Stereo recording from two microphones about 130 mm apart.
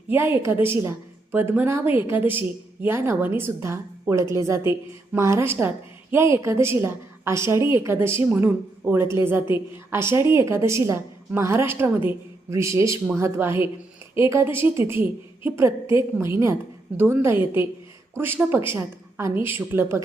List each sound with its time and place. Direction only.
0.1 s a woman's voice: 20° right (ahead or behind)